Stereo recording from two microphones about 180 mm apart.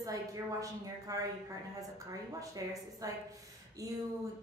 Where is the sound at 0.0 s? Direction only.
20° right (ahead or behind).